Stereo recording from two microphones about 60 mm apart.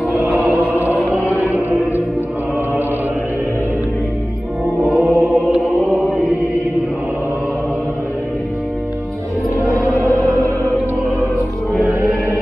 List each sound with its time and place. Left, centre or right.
4.8 s choir: centre
5.2 s chant: centre
11.9 s music: right